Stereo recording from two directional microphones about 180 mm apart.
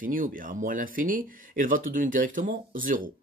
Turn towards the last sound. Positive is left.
turn(degrees=-50)  # may be behind; listen again after turning